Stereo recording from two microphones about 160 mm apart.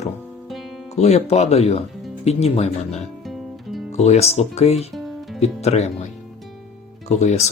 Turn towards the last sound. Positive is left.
turn(degrees=45)  # may be behind; listen again after turning